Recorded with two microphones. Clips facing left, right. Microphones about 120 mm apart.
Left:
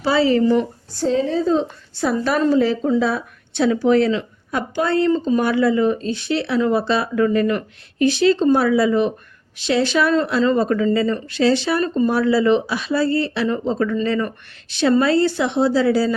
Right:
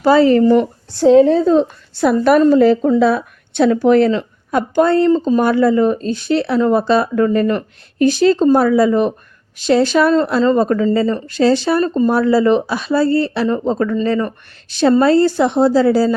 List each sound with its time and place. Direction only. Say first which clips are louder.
0.0 s speech: right 6 dB; 50° right (ahead or behind)